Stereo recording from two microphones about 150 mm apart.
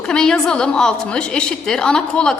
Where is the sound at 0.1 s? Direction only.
5° left (ahead or behind).